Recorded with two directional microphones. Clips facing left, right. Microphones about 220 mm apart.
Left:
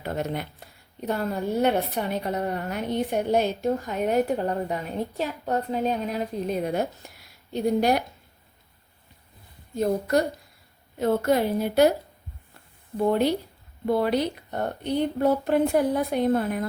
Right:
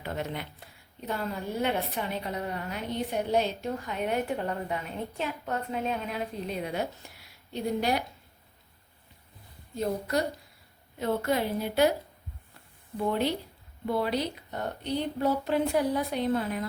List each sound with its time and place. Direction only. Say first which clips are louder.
0.0 s a woman's voice: left 5 dB; 40° left (ahead or behind)
9.7 s a woman's voice: left 6 dB; 50° left (ahead or behind)
13.1 s a woman's voice: left 6 dB; 45° left (ahead or behind)